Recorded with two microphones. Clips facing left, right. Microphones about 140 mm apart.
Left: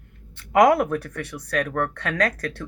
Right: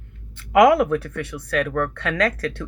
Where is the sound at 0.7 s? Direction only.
45° left (ahead or behind).